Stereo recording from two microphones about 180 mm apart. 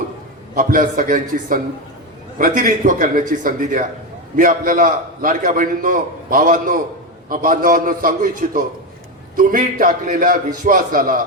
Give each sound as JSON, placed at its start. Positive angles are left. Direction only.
{"t": 0.5, "sound": "a man's voice", "side_deg": -50}